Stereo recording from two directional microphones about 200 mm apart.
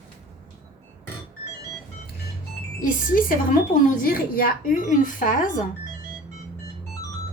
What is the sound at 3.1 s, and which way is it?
Speech, 45° left (ahead or behind).